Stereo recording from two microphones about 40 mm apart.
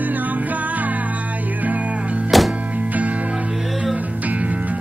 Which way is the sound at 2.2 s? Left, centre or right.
Centre.